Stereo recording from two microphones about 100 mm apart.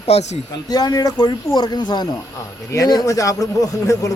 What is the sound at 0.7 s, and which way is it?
A man's voice, 40° left (ahead or behind).